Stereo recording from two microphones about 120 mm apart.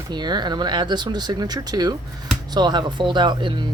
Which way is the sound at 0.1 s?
35° right (ahead or behind).